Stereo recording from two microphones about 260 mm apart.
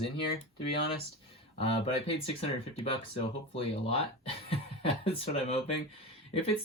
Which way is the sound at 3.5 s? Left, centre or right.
Left.